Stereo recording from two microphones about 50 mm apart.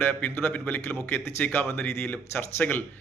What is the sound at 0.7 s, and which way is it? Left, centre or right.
Speech, left.